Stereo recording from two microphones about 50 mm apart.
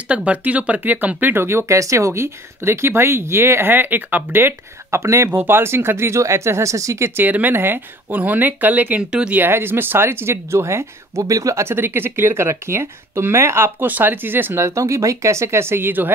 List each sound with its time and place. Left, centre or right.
0.1 s speech: right
1.4 s speech: right
5.3 s speech: right
7.2 s speech: right
8.2 s speech: right
9.5 s speech: right
13.8 s speech: right
14.5 s speech: right